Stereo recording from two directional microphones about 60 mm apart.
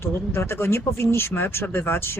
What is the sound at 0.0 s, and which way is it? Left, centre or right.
Speech, left.